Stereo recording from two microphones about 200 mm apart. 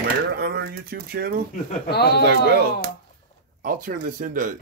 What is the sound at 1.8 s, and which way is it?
Speech, 50° left (ahead or behind).